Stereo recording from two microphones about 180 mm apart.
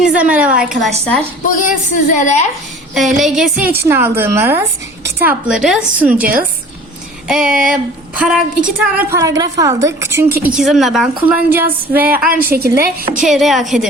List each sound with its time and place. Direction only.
0.1 s a woman's voice: 5° right (ahead or behind)
2.0 s a woman's voice: 45° left (ahead or behind)
2.9 s a woman's voice: centre (ahead or behind)
12.3 s a woman's voice: 55° right (ahead or behind)
13.2 s a woman's voice: centre (ahead or behind)